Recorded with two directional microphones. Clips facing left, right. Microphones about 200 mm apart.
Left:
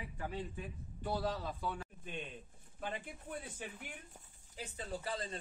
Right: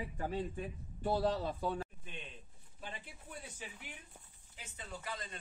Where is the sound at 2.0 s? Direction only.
50° left (ahead or behind).